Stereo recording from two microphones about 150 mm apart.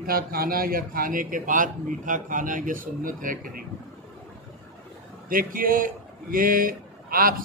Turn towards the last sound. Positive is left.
turn(degrees=-70)  # may be behind; listen again after turning